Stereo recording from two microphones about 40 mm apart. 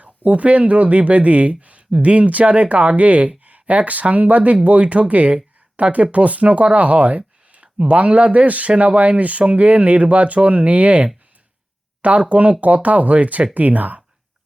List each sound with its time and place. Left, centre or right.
0.3 s speech: right
12.3 s speech: right